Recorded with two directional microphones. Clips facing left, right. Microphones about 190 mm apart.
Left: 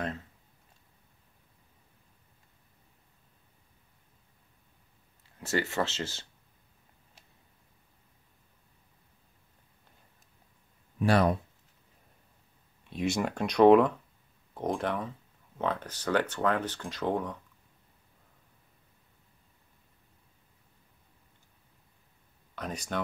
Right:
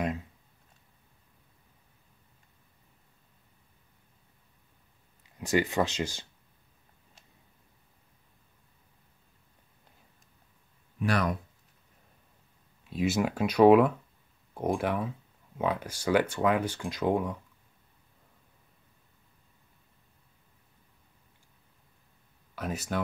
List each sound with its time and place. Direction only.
5.2 s speech: 15° right (ahead or behind)
11.0 s speech: 30° left (ahead or behind)
12.8 s speech: 5° right (ahead or behind)
22.6 s speech: 5° right (ahead or behind)